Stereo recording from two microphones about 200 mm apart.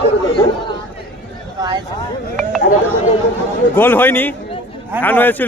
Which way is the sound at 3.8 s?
10° left (ahead or behind).